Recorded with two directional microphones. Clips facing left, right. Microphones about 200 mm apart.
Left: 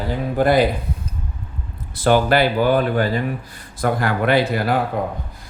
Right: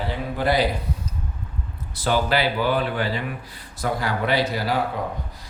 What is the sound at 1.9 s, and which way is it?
Speech, 55° left (ahead or behind).